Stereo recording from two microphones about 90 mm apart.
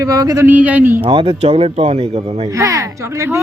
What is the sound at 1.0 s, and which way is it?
Speech, 75° right (ahead or behind).